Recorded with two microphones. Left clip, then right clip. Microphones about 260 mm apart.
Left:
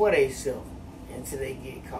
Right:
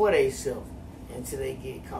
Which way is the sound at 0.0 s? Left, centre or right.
Centre.